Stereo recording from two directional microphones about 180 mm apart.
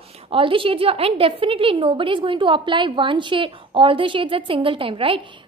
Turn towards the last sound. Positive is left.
turn(degrees=-30)  # may be behind; listen again after turning